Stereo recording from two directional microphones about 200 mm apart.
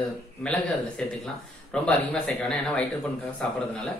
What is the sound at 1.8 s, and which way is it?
Speech, 5° left (ahead or behind).